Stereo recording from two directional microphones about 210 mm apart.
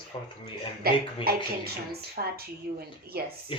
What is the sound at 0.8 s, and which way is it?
Speech, 45° right (ahead or behind).